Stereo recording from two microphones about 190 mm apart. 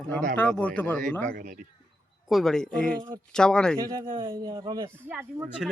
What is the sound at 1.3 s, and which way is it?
Speech, 45° right (ahead or behind).